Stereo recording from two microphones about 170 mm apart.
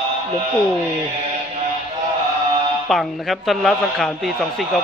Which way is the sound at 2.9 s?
Centre (ahead or behind).